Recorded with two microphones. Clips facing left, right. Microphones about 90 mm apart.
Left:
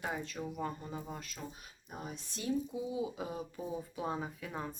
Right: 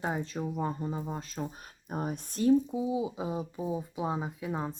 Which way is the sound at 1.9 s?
50° right (ahead or behind).